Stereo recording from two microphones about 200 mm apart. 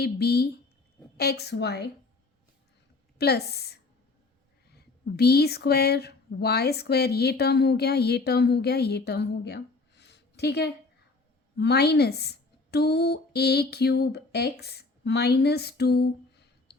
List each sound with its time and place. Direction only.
0.0 s a woman's voice: 55° left (ahead or behind)
3.2 s speech: 55° left (ahead or behind)
5.1 s a woman's voice: 55° left (ahead or behind)